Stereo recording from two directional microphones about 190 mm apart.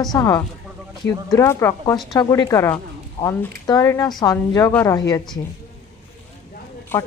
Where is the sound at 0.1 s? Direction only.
20° left (ahead or behind).